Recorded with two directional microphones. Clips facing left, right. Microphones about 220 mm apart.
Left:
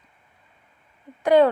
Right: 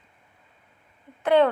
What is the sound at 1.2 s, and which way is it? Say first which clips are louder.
Speech: left 3 dB; 10° left (ahead or behind).